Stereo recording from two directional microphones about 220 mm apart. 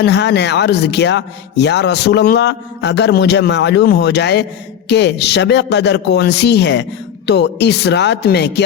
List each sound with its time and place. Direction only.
0.0 s speech: 50° left (ahead or behind)